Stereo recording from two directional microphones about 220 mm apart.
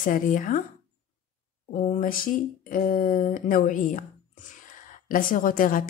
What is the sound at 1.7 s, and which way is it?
Speech, 35° left (ahead or behind).